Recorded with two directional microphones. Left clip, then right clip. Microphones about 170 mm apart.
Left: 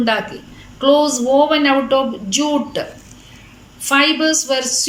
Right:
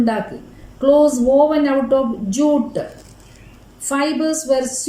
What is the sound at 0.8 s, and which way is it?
Speech, 25° right (ahead or behind).